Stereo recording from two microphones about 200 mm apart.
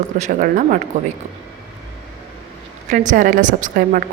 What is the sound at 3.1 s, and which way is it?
A woman's voice, 40° right (ahead or behind).